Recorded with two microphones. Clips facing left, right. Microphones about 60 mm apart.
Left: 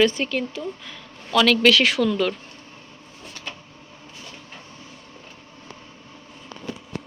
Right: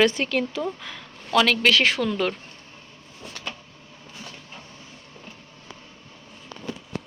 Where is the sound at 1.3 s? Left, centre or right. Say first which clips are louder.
Left 1 dB; right.